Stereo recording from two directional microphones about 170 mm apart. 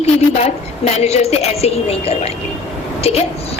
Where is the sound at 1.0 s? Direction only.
40° left (ahead or behind).